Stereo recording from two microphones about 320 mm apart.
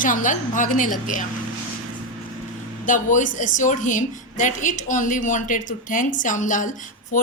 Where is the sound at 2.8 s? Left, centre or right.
Left.